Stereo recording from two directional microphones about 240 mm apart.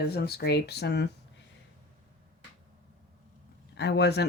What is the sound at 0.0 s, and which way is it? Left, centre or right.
Speech, left.